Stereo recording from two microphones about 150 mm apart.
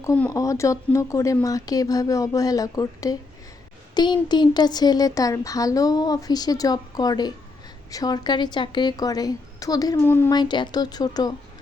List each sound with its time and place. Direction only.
0.3 s speech: 20° left (ahead or behind)
10.3 s speech: 30° left (ahead or behind)